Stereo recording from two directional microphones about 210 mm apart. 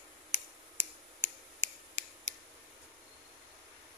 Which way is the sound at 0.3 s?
35° right (ahead or behind).